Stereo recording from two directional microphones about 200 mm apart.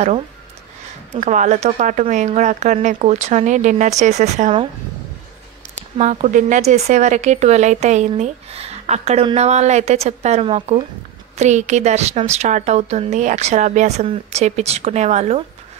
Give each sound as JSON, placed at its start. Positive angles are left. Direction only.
{"t": 1.1, "sound": "speech", "side_deg": -35}
{"t": 5.8, "sound": "speech", "side_deg": -35}